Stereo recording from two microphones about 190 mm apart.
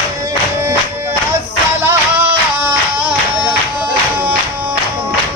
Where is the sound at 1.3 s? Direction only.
10° right (ahead or behind).